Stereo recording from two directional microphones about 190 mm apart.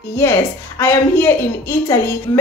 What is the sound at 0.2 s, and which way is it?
A child's voice, 15° left (ahead or behind).